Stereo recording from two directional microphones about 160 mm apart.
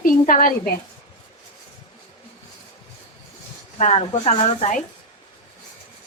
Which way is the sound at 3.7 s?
40° left (ahead or behind).